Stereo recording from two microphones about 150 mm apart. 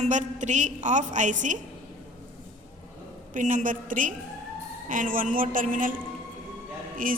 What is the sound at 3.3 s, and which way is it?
A woman's voice, 60° right (ahead or behind).